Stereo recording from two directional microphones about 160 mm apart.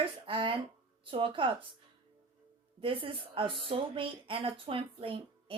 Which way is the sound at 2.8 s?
35° right (ahead or behind).